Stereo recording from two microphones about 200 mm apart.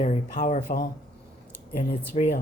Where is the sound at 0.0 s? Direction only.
35° left (ahead or behind).